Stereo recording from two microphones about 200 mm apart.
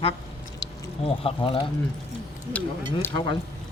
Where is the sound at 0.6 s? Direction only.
25° left (ahead or behind).